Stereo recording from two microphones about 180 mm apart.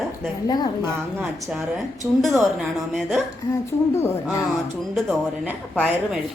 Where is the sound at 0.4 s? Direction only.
25° left (ahead or behind).